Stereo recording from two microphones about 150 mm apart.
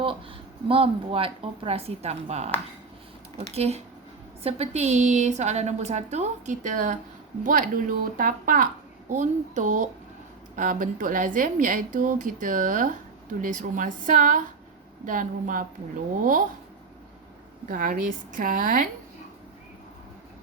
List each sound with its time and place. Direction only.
0.7 s a woman's voice: 35° right (ahead or behind); by 15.6 s 65° right (ahead or behind)
17.7 s a woman's voice: 65° right (ahead or behind)